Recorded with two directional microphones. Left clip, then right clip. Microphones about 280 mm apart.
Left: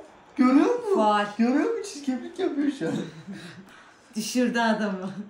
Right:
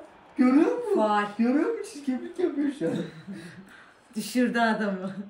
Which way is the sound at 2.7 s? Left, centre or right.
Centre.